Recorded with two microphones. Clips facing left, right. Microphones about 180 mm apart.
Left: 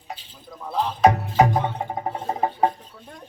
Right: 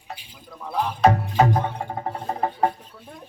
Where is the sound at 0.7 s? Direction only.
10° right (ahead or behind).